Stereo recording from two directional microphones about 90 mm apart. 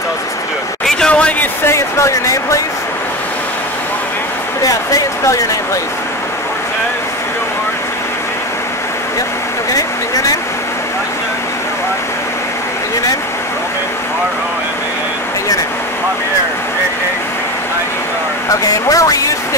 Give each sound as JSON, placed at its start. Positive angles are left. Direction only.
{"t": 0.8, "sound": "a sound", "side_deg": 10}
{"t": 1.6, "sound": "speech", "side_deg": 30}
{"t": 9.7, "sound": "speech", "side_deg": 40}
{"t": 18.5, "sound": "speech", "side_deg": 40}